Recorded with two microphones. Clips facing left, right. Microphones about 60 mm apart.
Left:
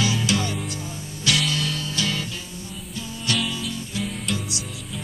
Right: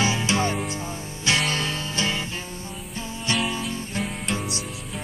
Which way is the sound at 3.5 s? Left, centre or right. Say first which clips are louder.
Right 1 dB; right.